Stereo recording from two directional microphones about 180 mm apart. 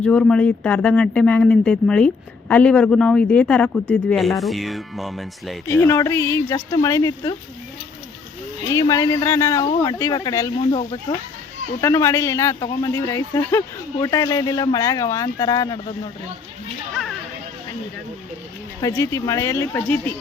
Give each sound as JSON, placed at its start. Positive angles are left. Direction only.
{"t": 0.0, "sound": "speech", "side_deg": 5}
{"t": 5.6, "sound": "speech", "side_deg": 10}
{"t": 8.7, "sound": "speech", "side_deg": 20}
{"t": 11.8, "sound": "speech", "side_deg": 15}
{"t": 18.8, "sound": "speech", "side_deg": 15}